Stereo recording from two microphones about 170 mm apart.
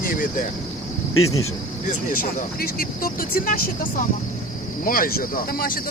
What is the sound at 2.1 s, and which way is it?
Speech, 55° left (ahead or behind).